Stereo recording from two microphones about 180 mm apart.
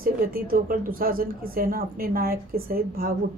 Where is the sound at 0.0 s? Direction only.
55° right (ahead or behind).